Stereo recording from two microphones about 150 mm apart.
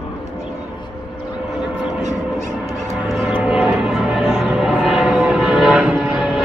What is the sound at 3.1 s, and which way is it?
Music, 5° right (ahead or behind).